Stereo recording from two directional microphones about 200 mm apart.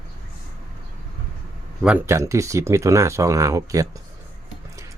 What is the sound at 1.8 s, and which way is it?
Speech, 5° right (ahead or behind).